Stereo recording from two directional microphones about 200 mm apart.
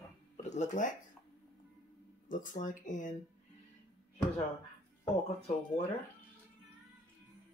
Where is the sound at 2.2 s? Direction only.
40° left (ahead or behind).